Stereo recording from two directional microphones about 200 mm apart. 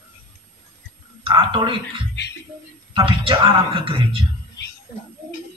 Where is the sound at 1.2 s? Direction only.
25° right (ahead or behind).